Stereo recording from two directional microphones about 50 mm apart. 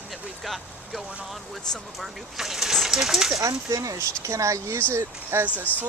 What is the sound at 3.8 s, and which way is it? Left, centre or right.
Speech, right.